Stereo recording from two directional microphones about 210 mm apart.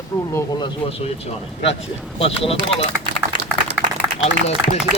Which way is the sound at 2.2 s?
25° left (ahead or behind).